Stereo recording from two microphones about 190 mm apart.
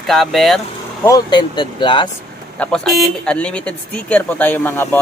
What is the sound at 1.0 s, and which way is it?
Speech, 20° left (ahead or behind).